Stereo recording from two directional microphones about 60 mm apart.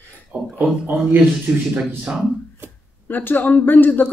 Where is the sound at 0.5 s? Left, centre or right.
Right.